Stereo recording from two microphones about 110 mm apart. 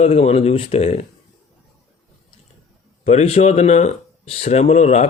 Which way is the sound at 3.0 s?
70° left (ahead or behind).